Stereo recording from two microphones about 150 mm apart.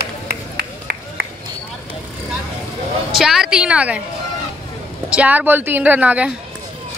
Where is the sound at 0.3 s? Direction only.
90° right.